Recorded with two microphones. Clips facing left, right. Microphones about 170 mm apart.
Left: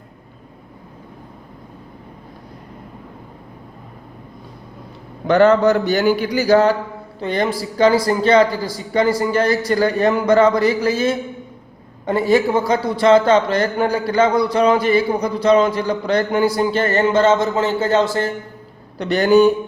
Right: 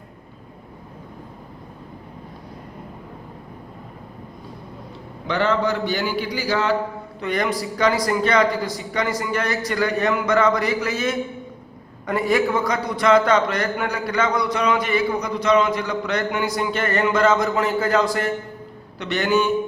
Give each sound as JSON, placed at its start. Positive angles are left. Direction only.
{"t": 5.3, "sound": "a man's voice", "side_deg": 45}
{"t": 7.2, "sound": "a man's voice", "side_deg": 30}